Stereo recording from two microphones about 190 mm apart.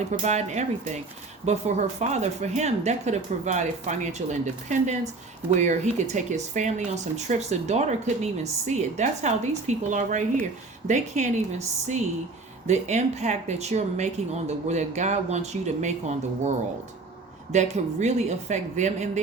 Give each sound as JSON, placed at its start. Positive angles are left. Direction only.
{"t": 0.1, "sound": "speech", "side_deg": -35}